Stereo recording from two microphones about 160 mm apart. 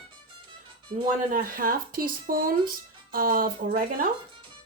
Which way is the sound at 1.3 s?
60° right (ahead or behind).